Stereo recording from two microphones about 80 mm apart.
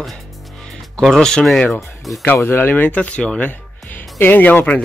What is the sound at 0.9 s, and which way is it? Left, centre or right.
Speech, centre.